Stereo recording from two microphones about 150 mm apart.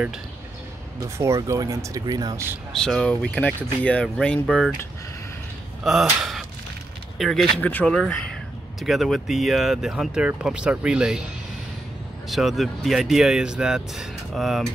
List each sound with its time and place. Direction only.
0.9 s speech: 20° right (ahead or behind)
2.7 s speech: 5° left (ahead or behind)
5.9 s speech: centre (ahead or behind)
7.2 s speech: centre (ahead or behind)
12.3 s speech: centre (ahead or behind)